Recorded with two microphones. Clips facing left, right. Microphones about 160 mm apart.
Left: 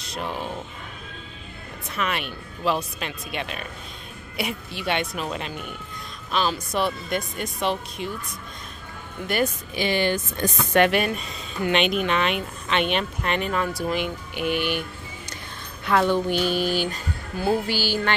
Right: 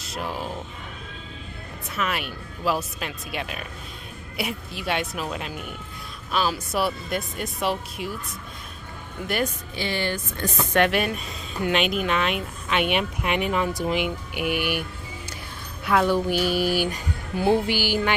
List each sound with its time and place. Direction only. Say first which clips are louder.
0.0 s speech: even; 5° right (ahead or behind)
2.0 s speech: even; 5° right (ahead or behind)
9.2 s speech: left 1 dB; 5° right (ahead or behind)
9.8 s speech: left 4 dB; 15° left (ahead or behind)
10.7 s speech: left 2 dB; centre (ahead or behind)